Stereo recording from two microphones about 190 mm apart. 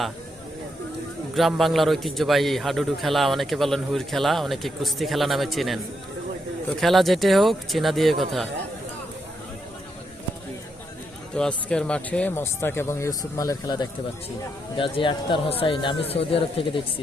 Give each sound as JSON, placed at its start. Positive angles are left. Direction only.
{"t": 1.4, "sound": "a man's voice", "side_deg": 0}
{"t": 11.3, "sound": "speech", "side_deg": 5}